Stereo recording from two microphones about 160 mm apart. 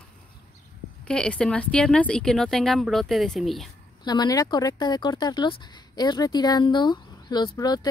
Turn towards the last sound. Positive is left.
turn(degrees=25)  # may be behind; listen again after turning